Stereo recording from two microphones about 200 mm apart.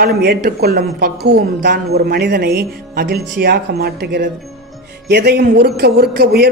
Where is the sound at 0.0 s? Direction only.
50° right (ahead or behind).